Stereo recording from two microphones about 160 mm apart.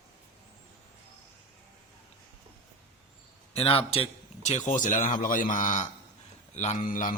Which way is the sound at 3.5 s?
40° left (ahead or behind).